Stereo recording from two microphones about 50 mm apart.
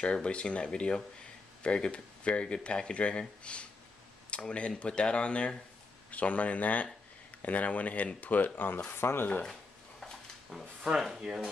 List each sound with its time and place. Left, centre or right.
0.0 s speech: left
9.5 s a sound: centre
10.8 s speech: centre